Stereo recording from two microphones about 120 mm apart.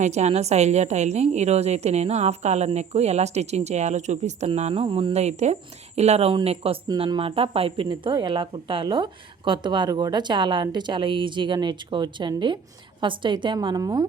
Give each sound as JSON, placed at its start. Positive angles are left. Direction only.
{"t": 0.0, "sound": "a woman's voice", "side_deg": -70}
{"t": 4.4, "sound": "speech", "side_deg": -65}
{"t": 4.7, "sound": "speech", "side_deg": -50}
{"t": 5.1, "sound": "a woman's voice", "side_deg": -70}
{"t": 7.9, "sound": "a woman's voice", "side_deg": -40}